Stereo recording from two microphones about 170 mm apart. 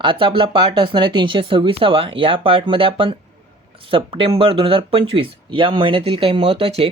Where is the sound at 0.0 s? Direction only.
30° right (ahead or behind).